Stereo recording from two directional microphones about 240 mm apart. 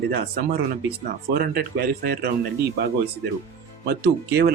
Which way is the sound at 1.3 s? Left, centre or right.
Right.